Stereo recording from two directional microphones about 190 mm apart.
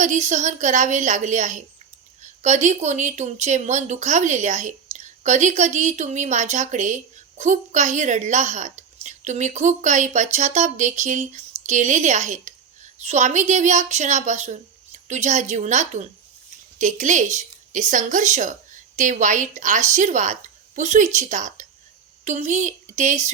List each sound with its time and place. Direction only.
0.0 s a woman's voice: 40° right (ahead or behind)